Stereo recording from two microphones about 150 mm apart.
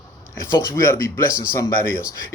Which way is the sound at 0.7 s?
20° left (ahead or behind).